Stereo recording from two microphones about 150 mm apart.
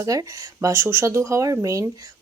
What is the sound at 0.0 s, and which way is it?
Speech, 20° right (ahead or behind).